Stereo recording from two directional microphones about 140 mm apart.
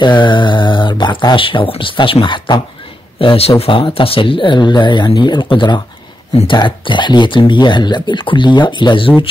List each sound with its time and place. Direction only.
0.0 s speech: 35° left (ahead or behind)